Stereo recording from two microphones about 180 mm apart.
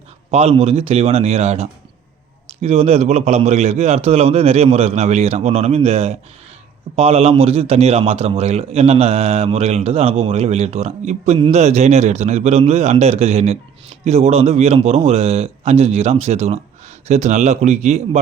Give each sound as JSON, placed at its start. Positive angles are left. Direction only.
{"t": 0.3, "sound": "a man's voice", "side_deg": -35}